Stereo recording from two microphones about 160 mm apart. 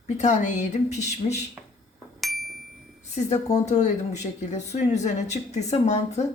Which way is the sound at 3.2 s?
45° left (ahead or behind).